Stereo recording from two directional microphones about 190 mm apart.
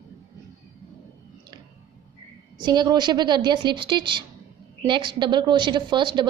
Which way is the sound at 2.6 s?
20° right (ahead or behind).